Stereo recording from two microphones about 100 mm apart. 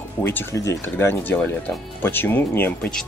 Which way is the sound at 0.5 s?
30° left (ahead or behind).